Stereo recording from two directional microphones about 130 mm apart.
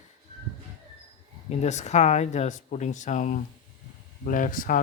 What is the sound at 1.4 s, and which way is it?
Speech, 60° left (ahead or behind).